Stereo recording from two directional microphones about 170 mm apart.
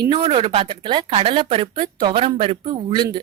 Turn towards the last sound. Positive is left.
turn(degrees=-25)  # may be behind; listen again after turning